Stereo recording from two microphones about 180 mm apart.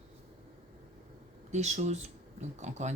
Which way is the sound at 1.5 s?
40° right (ahead or behind).